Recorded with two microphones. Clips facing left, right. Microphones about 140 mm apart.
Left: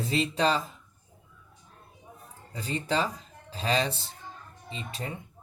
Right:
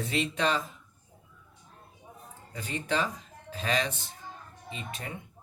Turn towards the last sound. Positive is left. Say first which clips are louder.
# left 2 dB
turn(degrees=30)  # may be behind; listen again after turning